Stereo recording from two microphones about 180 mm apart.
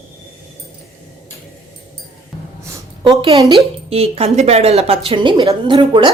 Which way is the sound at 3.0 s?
25° right (ahead or behind).